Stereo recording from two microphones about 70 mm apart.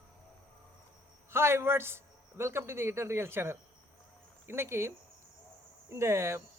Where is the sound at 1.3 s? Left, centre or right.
Right.